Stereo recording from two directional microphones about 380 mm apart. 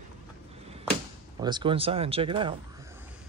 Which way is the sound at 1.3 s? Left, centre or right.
Centre.